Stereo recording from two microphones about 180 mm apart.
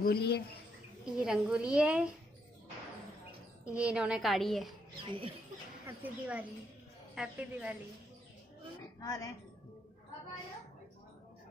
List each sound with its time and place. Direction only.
0.0 s speech: 65° left (ahead or behind)
1.1 s a woman's voice: 5° right (ahead or behind)
3.6 s a woman's voice: 5° right (ahead or behind)
5.0 s speech: 30° right (ahead or behind)
5.9 s a woman's voice: 10° right (ahead or behind)
9.0 s a woman's voice: 20° left (ahead or behind)